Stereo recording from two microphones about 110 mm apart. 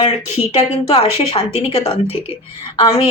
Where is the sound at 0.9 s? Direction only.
55° left (ahead or behind).